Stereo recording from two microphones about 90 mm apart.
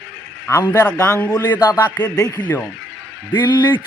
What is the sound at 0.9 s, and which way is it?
Speech, 35° left (ahead or behind).